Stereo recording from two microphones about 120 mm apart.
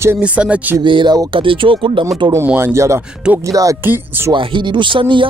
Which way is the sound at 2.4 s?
20° right (ahead or behind).